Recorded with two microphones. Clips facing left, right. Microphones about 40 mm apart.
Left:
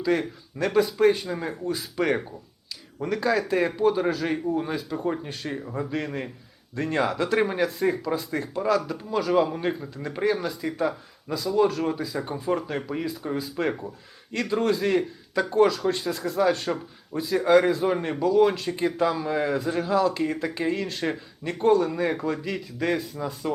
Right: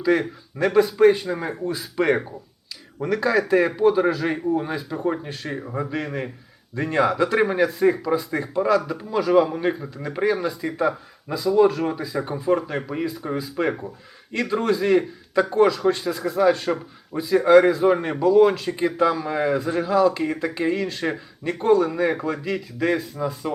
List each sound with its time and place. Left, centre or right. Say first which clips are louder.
0.1 s speech: right 5 dB; centre
0.7 s a man's voice: right 4 dB; centre
3.2 s a man's voice: right 4 dB; centre
4.9 s speech: right 4 dB; centre
5.2 s speech: right 2 dB; centre
5.6 s a man's voice: right 3 dB; centre